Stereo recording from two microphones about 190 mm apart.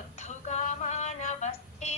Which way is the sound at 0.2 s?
40° left (ahead or behind).